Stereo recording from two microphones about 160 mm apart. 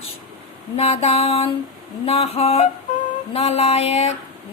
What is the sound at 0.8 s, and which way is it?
A woman's voice, 40° left (ahead or behind).